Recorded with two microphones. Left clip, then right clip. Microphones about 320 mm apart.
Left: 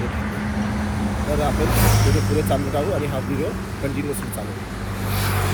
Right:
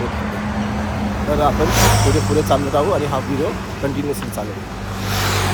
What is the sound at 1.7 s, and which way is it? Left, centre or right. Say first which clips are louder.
Speech: right 6 dB; right.